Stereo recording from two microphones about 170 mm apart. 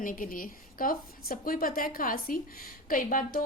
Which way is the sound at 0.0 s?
55° left (ahead or behind).